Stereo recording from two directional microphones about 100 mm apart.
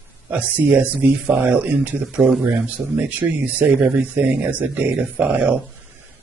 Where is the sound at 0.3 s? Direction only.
15° right (ahead or behind).